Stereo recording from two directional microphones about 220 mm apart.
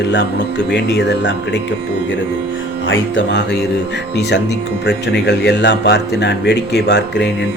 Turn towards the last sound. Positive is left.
turn(degrees=50)  # may be behind; listen again after turning